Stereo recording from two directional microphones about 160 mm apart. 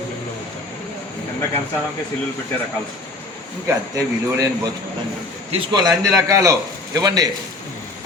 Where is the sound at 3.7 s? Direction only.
20° right (ahead or behind).